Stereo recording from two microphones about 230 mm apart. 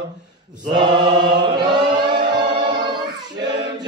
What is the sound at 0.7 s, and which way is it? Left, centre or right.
Chant, centre.